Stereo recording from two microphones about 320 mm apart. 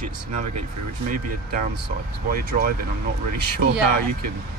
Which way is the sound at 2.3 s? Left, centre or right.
Right.